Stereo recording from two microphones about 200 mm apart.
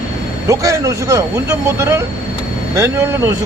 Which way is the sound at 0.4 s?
15° right (ahead or behind).